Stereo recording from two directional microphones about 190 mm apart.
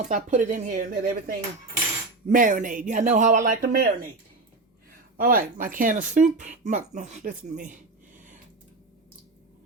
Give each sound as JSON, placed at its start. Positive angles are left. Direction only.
{"t": 0.0, "sound": "speech", "side_deg": -40}
{"t": 5.1, "sound": "speech", "side_deg": -50}